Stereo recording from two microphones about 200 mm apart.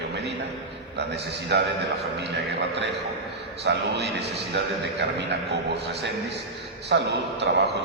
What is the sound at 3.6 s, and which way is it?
A man's voice, 55° right (ahead or behind).